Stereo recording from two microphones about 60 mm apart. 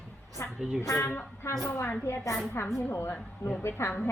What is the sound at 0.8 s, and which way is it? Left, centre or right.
A woman's voice, left.